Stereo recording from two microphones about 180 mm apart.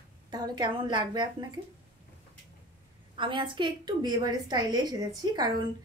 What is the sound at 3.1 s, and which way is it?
A woman's voice, 25° right (ahead or behind).